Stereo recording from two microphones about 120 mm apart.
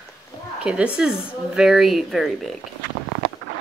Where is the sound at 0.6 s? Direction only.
10° right (ahead or behind).